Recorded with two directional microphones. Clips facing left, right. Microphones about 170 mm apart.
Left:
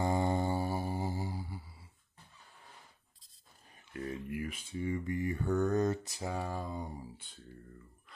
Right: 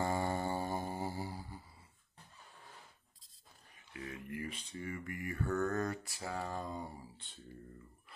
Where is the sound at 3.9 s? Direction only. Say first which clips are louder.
Left 6 dB; 45° left (ahead or behind).